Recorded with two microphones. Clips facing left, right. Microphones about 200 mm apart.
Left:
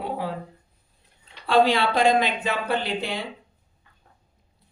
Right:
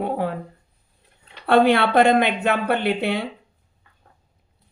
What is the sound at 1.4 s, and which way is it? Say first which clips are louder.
Speech: right 3 dB; 60° right (ahead or behind).